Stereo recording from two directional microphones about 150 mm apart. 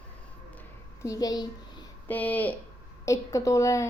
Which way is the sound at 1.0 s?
25° left (ahead or behind).